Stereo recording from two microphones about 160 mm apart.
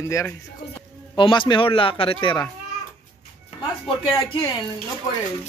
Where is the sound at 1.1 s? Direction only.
30° left (ahead or behind).